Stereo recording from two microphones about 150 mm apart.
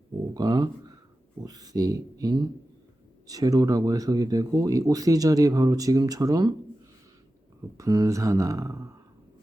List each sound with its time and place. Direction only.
0.3 s speech: 25° right (ahead or behind)
7.8 s speech: 25° right (ahead or behind)